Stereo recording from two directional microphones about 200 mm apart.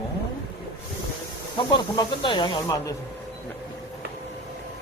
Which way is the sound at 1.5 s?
25° left (ahead or behind).